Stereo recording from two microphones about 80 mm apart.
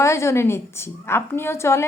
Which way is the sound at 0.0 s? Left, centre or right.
Left.